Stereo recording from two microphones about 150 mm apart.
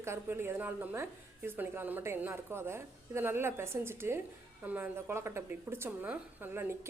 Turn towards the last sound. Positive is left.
turn(degrees=-15)  # may be behind; listen again after turning